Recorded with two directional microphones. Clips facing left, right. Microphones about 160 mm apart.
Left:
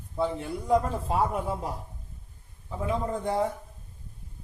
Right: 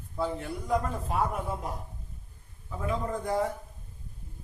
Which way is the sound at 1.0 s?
30° left (ahead or behind).